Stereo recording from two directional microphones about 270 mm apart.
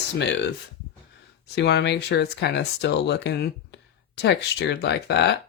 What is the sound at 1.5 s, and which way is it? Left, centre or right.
Speech, left.